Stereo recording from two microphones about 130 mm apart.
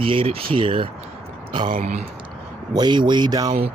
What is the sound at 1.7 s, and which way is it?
Speech, 75° right (ahead or behind).